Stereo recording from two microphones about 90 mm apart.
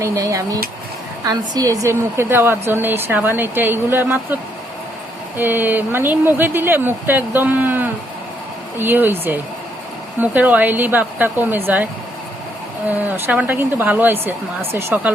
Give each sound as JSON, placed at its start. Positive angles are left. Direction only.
{"t": 0.0, "sound": "speech", "side_deg": -40}
{"t": 5.4, "sound": "speech", "side_deg": -20}
{"t": 12.9, "sound": "speech", "side_deg": -20}